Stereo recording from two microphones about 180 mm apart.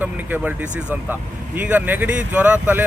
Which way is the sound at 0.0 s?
10° right (ahead or behind).